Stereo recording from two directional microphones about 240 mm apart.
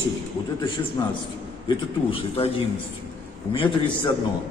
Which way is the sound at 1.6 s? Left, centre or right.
Left.